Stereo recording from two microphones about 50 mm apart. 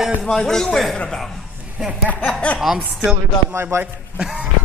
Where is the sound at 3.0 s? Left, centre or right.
Right.